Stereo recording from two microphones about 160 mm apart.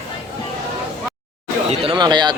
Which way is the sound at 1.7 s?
30° right (ahead or behind).